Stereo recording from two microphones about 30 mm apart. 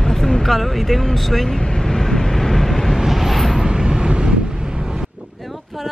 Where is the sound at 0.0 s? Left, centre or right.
Centre.